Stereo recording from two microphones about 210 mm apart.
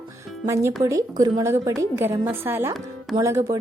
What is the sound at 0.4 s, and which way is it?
A woman's voice, 15° right (ahead or behind).